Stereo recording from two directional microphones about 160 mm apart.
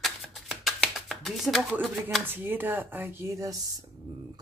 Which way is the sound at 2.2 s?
15° right (ahead or behind).